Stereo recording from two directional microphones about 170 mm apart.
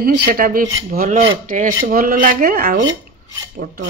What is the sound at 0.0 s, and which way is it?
Speech, 60° right (ahead or behind).